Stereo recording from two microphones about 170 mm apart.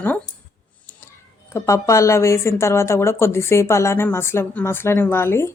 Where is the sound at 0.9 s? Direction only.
15° left (ahead or behind).